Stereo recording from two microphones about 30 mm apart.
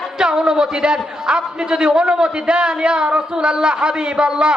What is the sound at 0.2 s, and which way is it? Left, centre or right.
A man's voice, right.